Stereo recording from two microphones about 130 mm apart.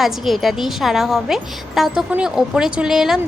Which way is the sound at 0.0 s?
Centre (ahead or behind).